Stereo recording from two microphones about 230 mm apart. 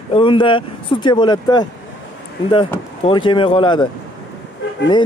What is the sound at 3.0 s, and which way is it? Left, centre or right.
Speech, left.